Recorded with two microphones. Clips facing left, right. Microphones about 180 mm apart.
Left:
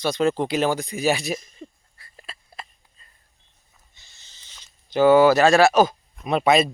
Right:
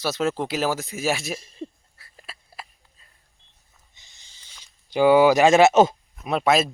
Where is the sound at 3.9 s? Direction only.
15° right (ahead or behind).